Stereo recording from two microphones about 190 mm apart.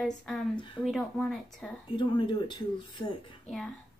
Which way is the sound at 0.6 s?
25° left (ahead or behind).